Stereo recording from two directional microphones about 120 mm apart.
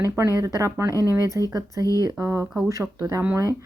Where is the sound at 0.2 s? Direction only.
25° right (ahead or behind).